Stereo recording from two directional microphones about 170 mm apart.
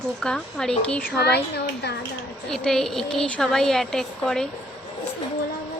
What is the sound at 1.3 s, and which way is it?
Speech, 75° left (ahead or behind).